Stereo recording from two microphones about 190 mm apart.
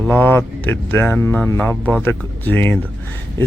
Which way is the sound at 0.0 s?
10° left (ahead or behind).